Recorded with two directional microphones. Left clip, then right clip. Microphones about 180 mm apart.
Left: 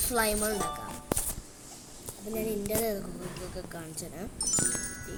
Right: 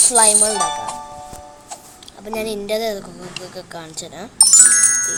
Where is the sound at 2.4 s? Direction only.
15° left (ahead or behind).